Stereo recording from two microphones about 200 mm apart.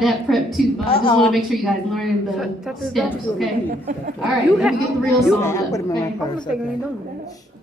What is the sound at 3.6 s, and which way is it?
Speech, 45° right (ahead or behind).